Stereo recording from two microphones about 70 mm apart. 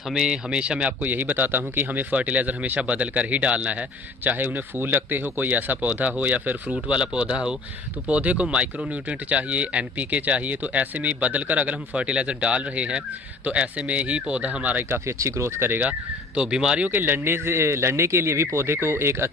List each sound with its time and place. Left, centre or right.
0.1 s speech: centre
14.9 s speech: right
15.8 s speech: centre
16.9 s speech: right